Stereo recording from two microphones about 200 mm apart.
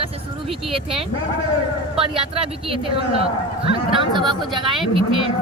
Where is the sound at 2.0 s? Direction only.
30° right (ahead or behind).